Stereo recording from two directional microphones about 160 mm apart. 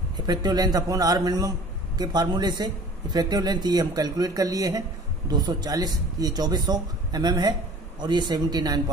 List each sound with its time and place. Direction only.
0.3 s a man's voice: 25° right (ahead or behind)